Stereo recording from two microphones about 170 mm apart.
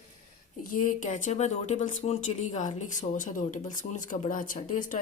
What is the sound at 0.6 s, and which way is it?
Speech, 50° left (ahead or behind).